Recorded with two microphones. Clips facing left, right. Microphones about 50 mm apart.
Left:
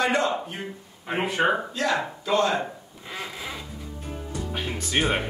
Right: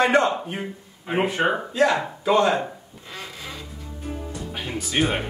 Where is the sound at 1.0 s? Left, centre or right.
Centre.